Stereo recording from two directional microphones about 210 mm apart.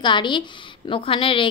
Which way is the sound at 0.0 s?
20° left (ahead or behind).